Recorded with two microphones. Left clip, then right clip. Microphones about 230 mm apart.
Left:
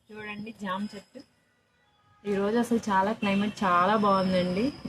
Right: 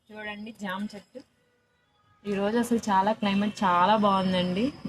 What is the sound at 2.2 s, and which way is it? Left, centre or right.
A woman's voice, right.